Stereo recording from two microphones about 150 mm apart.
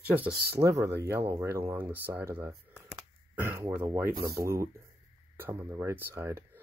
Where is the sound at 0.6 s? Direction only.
20° right (ahead or behind).